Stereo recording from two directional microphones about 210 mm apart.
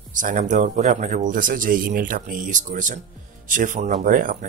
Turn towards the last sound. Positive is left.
turn(degrees=-40)  # may be behind; listen again after turning